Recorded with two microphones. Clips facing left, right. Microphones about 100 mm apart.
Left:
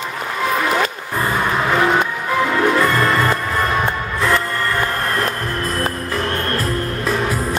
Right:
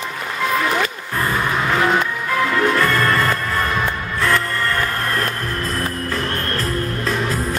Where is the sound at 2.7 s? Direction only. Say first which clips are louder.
Left 1 dB; 15° left (ahead or behind).